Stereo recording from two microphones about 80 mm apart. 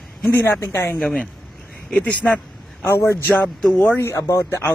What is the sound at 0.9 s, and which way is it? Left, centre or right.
A woman's voice, centre.